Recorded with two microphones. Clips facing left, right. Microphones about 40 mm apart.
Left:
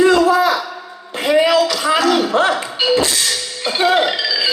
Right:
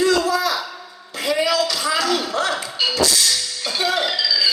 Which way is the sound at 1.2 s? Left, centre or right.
Left.